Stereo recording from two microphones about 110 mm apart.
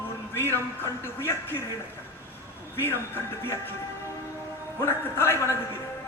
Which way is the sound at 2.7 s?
20° left (ahead or behind).